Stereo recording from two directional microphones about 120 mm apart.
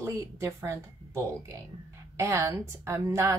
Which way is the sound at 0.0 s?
25° right (ahead or behind).